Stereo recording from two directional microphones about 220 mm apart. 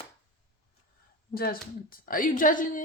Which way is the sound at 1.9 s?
40° left (ahead or behind).